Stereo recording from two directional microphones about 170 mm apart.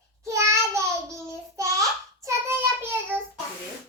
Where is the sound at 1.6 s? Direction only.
20° right (ahead or behind).